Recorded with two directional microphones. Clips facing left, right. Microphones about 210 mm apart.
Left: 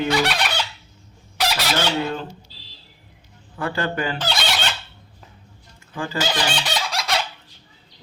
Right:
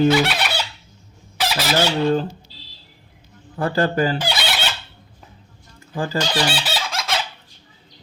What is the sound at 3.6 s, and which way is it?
Speech, 35° right (ahead or behind).